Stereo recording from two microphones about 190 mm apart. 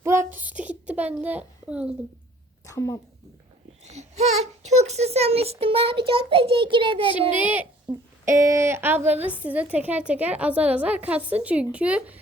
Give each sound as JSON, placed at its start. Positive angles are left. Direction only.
{"t": 0.0, "sound": "a sound", "side_deg": -15}
{"t": 2.6, "sound": "speech", "side_deg": 15}
{"t": 3.8, "sound": "a child's voice", "side_deg": -35}
{"t": 7.2, "sound": "a woman's voice", "side_deg": -10}